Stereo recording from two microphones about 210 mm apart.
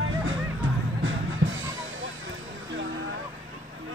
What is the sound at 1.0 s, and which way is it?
Music, 65° right (ahead or behind).